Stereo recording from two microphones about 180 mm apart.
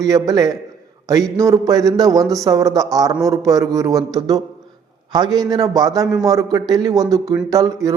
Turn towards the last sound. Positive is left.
turn(degrees=-20)  # may be behind; listen again after turning